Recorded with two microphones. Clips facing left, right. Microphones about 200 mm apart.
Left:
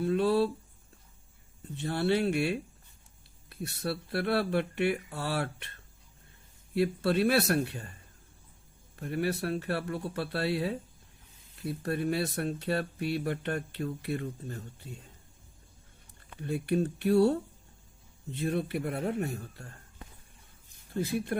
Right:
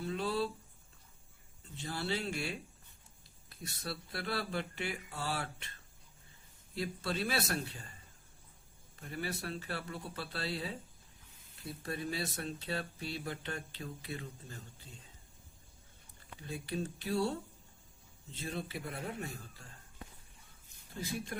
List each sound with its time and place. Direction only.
0.0 s a sound: 60° left (ahead or behind)
1.8 s speech: 60° left (ahead or behind)
6.7 s speech: 60° left (ahead or behind)
9.0 s speech: 60° left (ahead or behind)
11.8 s speech: 60° left (ahead or behind)
16.4 s speech: 60° left (ahead or behind)
21.0 s speech: 55° left (ahead or behind)